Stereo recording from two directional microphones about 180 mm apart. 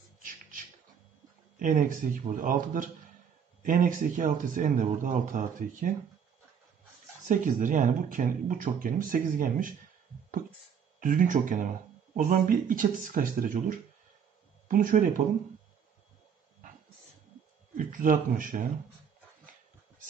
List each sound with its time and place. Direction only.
0.2 s a sound: 50° right (ahead or behind)
1.6 s speech: 50° right (ahead or behind)
7.2 s speech: 45° right (ahead or behind)
11.0 s speech: 45° right (ahead or behind)
17.7 s speech: 50° right (ahead or behind)